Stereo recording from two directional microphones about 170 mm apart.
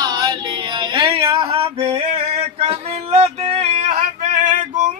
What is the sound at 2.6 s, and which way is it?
Male singing, 35° right (ahead or behind).